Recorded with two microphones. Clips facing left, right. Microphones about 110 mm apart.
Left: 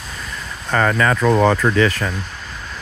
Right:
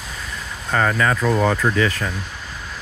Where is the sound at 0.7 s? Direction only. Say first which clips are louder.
Left 2 dB; 75° left (ahead or behind).